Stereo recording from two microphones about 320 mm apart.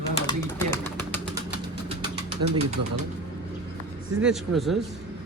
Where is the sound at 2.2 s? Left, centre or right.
Right.